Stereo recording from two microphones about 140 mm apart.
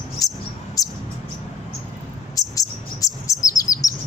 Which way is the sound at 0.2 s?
25° left (ahead or behind).